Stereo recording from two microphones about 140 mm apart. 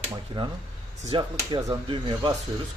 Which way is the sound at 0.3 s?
40° right (ahead or behind).